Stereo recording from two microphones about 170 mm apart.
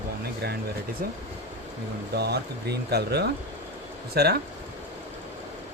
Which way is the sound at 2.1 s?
75° right (ahead or behind).